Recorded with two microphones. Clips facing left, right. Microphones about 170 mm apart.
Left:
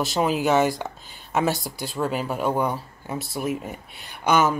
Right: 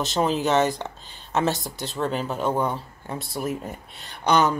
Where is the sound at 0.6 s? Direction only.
20° right (ahead or behind).